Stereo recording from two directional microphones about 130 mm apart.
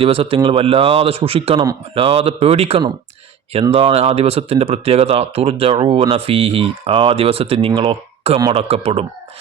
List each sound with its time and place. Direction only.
0.0 s speech: 45° right (ahead or behind)